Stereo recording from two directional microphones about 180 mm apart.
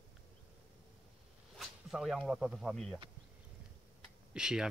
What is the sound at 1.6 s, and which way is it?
Speech, centre (ahead or behind).